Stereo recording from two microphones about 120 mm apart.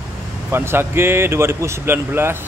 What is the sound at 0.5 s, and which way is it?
Speech, 20° right (ahead or behind).